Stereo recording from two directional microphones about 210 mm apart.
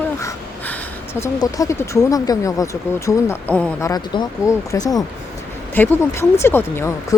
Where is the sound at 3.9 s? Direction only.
20° left (ahead or behind).